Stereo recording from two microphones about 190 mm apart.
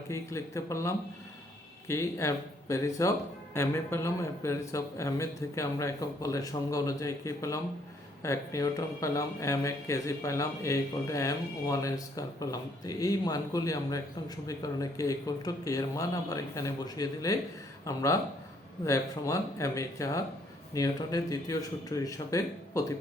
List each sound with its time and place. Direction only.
0.1 s speech: 15° left (ahead or behind)